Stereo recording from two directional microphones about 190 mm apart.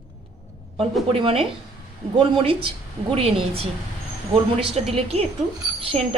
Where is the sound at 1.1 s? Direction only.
30° right (ahead or behind).